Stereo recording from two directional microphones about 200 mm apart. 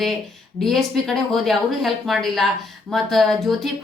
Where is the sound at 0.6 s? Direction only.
Centre (ahead or behind).